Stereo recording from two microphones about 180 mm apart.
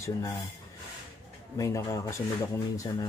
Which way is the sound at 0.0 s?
15° left (ahead or behind).